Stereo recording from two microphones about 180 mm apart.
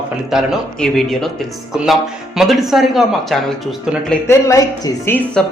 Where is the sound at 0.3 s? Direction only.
Centre (ahead or behind).